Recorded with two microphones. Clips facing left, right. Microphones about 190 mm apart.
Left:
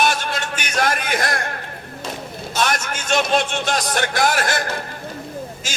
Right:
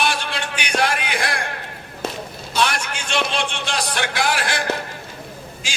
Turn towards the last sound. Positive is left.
turn(degrees=45)  # may be behind; listen again after turning